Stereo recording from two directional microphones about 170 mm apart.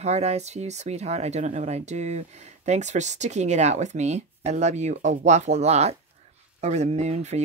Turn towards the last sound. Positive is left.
turn(degrees=-40)  # may be behind; listen again after turning